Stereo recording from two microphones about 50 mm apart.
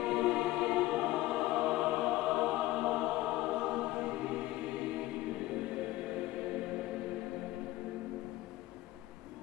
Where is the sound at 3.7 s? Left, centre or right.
Centre.